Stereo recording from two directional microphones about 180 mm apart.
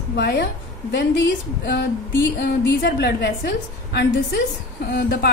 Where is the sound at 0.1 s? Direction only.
65° left (ahead or behind).